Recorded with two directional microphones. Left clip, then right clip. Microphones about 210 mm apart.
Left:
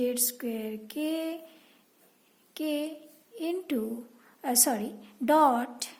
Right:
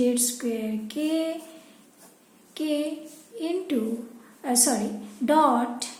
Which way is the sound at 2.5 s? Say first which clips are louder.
Right 5 dB; 50° left (ahead or behind).